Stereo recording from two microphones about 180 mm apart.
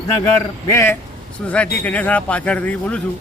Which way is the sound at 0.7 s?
15° left (ahead or behind).